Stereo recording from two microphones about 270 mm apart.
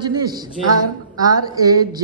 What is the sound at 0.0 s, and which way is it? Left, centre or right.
A woman's voice, centre.